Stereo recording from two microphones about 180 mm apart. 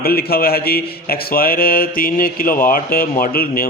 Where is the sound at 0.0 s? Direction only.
60° left (ahead or behind).